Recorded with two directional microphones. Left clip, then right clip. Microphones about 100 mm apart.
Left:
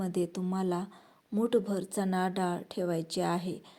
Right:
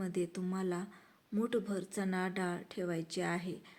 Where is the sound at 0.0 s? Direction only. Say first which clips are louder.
Left 5 dB; 45° left (ahead or behind).